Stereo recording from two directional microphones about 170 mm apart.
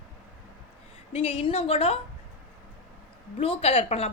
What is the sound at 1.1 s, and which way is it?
Speech, 35° left (ahead or behind).